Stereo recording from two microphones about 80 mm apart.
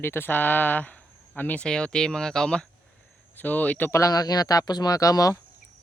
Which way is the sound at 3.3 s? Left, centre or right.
Left.